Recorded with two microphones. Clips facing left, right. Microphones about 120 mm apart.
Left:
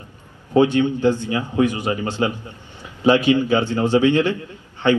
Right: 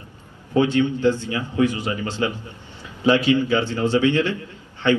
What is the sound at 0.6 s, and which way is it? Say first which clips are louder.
Speech: left 3 dB; 15° left (ahead or behind).